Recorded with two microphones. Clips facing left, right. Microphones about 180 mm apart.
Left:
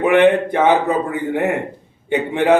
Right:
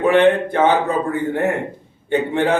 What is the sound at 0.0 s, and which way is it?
A man's voice, 15° left (ahead or behind).